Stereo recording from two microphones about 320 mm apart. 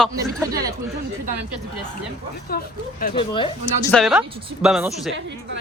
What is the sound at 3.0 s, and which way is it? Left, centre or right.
Speech, centre.